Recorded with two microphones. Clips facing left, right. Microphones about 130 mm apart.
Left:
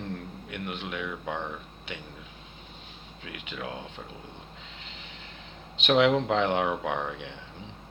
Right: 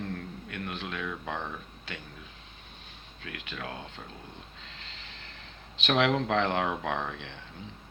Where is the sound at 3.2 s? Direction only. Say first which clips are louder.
Left 2 dB; 15° left (ahead or behind).